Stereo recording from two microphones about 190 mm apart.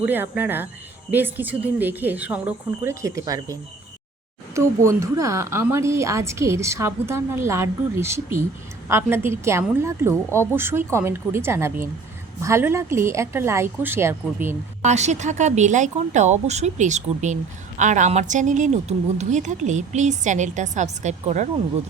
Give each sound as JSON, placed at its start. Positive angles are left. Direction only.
{"t": 0.0, "sound": "a woman's voice", "side_deg": -10}
{"t": 14.8, "sound": "a woman's voice", "side_deg": -35}